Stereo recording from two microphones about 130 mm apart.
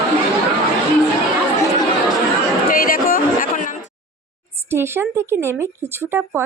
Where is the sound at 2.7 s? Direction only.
90° left.